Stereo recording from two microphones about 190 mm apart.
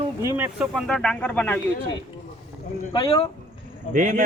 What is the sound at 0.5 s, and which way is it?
Speech, centre (ahead or behind).